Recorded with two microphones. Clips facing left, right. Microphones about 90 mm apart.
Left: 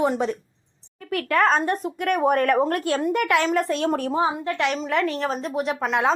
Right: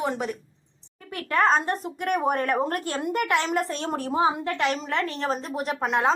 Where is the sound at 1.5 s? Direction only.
Centre (ahead or behind).